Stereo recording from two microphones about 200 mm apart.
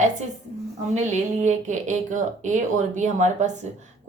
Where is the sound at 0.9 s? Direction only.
35° right (ahead or behind).